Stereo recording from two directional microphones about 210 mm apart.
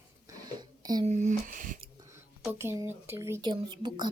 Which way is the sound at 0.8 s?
20° right (ahead or behind).